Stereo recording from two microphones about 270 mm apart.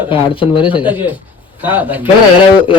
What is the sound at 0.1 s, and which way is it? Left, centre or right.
Speech, centre.